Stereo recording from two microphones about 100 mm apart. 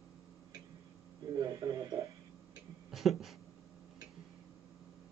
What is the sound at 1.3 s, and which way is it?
Radio, 40° right (ahead or behind).